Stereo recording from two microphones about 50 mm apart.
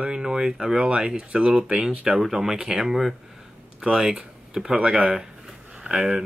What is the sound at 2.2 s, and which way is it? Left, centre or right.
Speech, centre.